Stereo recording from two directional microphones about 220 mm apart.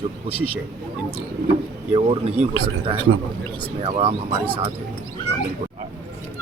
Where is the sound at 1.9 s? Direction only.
25° right (ahead or behind).